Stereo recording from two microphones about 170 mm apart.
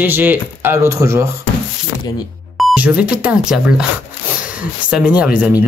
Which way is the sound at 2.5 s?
5° right (ahead or behind).